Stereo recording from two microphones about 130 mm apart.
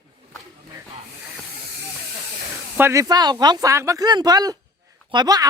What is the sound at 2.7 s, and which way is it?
Speech, 20° right (ahead or behind).